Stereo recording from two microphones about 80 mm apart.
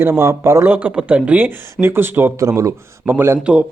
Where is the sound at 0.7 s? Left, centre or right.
Centre.